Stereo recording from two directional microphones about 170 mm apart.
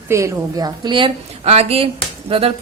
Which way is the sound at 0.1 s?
15° right (ahead or behind).